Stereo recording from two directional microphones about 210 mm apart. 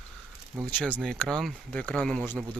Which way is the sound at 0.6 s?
5° left (ahead or behind).